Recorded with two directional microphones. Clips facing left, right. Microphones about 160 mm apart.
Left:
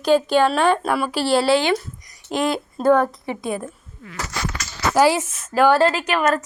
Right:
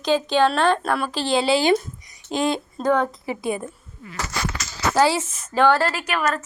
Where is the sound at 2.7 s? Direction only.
5° left (ahead or behind).